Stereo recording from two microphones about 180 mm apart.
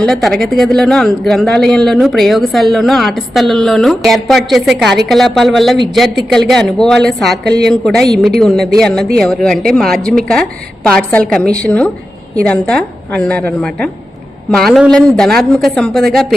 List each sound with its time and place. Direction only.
0.0 s speech: centre (ahead or behind)
7.4 s a woman's voice: 65° right (ahead or behind)
7.7 s a woman's voice: centre (ahead or behind)